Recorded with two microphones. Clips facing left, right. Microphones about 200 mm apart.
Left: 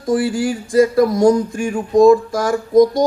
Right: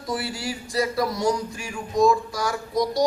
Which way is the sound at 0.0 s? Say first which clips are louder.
Left 12 dB; 50° left (ahead or behind).